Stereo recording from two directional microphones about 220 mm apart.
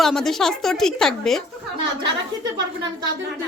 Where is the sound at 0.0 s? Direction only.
Centre (ahead or behind).